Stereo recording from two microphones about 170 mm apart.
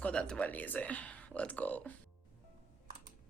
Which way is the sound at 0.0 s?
5° left (ahead or behind).